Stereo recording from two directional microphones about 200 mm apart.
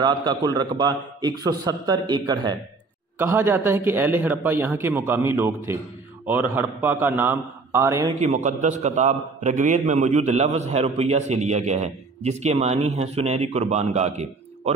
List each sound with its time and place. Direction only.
0.0 s a man's voice: 20° right (ahead or behind)
3.2 s a man's voice: 10° right (ahead or behind)
8.2 s a man's voice: 35° right (ahead or behind)